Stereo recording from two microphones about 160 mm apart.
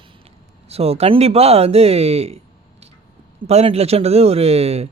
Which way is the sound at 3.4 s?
40° right (ahead or behind).